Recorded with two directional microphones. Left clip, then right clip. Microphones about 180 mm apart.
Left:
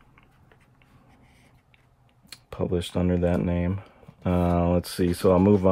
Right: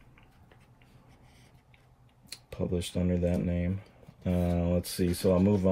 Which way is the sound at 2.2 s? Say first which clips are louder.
Left 6 dB; 20° left (ahead or behind).